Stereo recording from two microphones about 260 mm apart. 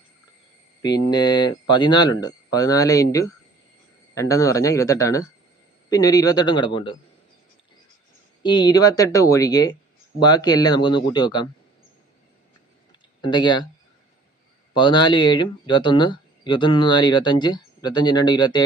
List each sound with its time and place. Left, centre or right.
0.8 s speech: centre
8.4 s speech: centre
13.2 s speech: centre
14.8 s speech: centre